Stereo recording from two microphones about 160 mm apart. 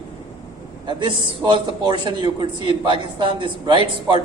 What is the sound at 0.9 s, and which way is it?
A man's voice, 30° right (ahead or behind).